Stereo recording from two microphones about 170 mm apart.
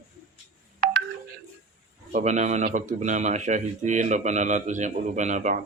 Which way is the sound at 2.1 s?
45° right (ahead or behind).